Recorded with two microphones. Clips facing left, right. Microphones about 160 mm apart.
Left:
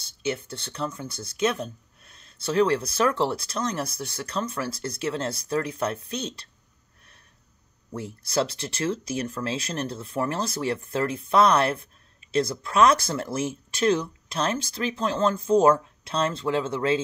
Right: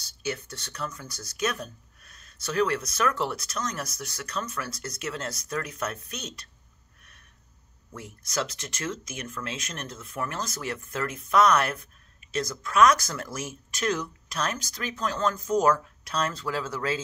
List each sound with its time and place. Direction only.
0.0 s speech: 25° left (ahead or behind)
7.9 s speech: 30° left (ahead or behind)